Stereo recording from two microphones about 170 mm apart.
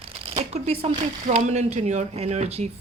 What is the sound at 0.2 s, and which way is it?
A woman's voice, 35° right (ahead or behind).